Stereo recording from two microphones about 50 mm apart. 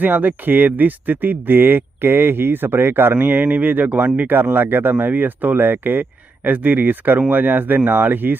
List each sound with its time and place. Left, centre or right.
0.0 s speech: right
3.2 s speech: right